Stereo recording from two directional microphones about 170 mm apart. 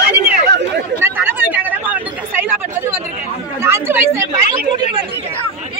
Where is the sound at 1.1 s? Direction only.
10° right (ahead or behind).